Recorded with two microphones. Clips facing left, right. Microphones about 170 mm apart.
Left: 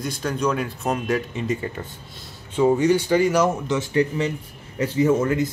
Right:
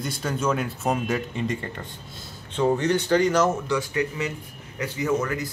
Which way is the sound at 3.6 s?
25° left (ahead or behind).